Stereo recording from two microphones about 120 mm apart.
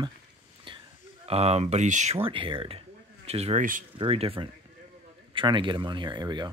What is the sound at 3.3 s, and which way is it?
Speech, 60° right (ahead or behind).